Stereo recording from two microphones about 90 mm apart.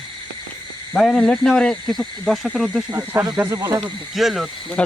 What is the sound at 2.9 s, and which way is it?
Speech, 30° right (ahead or behind).